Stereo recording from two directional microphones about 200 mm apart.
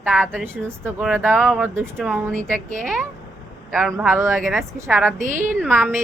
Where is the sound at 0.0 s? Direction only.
10° right (ahead or behind).